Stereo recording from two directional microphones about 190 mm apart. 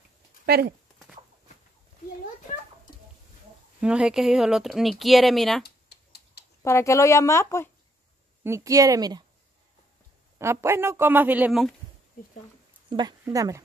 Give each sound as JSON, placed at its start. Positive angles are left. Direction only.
{"t": 0.5, "sound": "speech", "side_deg": -55}
{"t": 3.8, "sound": "speech", "side_deg": -5}
{"t": 5.6, "sound": "a sound", "side_deg": 60}
{"t": 6.6, "sound": "speech", "side_deg": 15}
{"t": 8.5, "sound": "speech", "side_deg": -15}
{"t": 10.4, "sound": "speech", "side_deg": -15}
{"t": 13.2, "sound": "speech", "side_deg": -15}